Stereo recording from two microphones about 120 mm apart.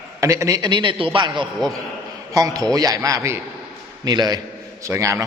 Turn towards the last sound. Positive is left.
turn(degrees=-25)  # may be behind; listen again after turning